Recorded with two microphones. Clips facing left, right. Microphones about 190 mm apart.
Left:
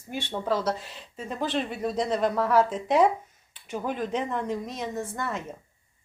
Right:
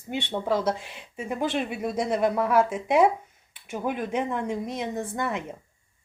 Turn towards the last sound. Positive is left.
turn(degrees=-15)  # may be behind; listen again after turning